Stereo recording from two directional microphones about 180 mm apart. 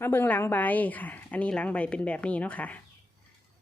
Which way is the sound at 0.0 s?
10° left (ahead or behind).